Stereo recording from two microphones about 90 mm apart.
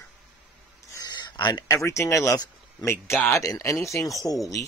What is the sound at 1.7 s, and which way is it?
Speech, 35° left (ahead or behind).